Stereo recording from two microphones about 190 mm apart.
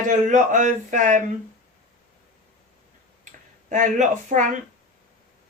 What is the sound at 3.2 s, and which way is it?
Speech, 40° right (ahead or behind).